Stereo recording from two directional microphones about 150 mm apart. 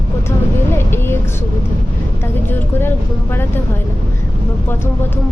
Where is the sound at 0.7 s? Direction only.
15° left (ahead or behind).